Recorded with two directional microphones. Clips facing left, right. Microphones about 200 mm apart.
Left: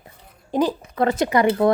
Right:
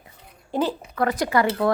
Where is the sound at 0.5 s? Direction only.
15° left (ahead or behind).